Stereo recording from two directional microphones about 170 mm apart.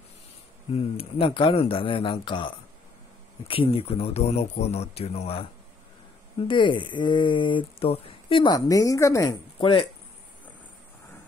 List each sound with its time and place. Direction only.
0.7 s speech: 35° left (ahead or behind)